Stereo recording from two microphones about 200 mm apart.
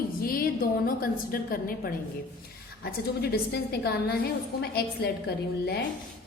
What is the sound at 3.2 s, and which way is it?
A woman's voice, 50° left (ahead or behind).